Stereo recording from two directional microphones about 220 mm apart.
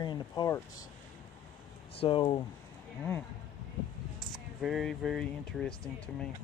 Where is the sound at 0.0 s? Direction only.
20° left (ahead or behind).